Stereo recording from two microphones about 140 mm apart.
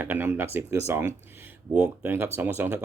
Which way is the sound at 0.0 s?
15° right (ahead or behind).